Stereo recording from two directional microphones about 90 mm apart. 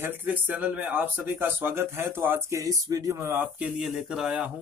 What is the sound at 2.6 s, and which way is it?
Speech, 40° right (ahead or behind).